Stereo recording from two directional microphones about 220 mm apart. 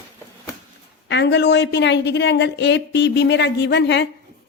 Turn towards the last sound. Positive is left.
turn(degrees=50)  # may be behind; listen again after turning